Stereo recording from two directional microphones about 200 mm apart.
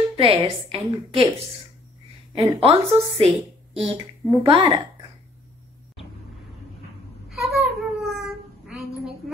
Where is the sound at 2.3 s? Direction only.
30° right (ahead or behind).